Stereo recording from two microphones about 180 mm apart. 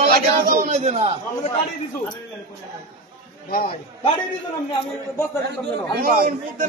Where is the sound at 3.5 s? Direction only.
55° left (ahead or behind).